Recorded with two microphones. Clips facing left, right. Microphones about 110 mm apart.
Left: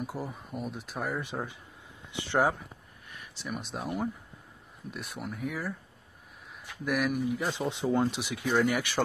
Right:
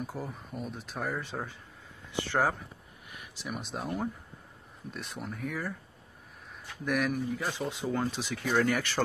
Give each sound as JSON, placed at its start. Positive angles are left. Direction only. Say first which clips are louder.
{"t": 0.0, "sound": "speech", "louder": "left 1 dB", "side_deg": 10}
{"t": 3.4, "sound": "speech", "louder": "left 1 dB", "side_deg": 0}
{"t": 4.9, "sound": "speech", "louder": "left 1 dB", "side_deg": 5}
{"t": 7.3, "sound": "speech", "louder": "left 2 dB", "side_deg": 20}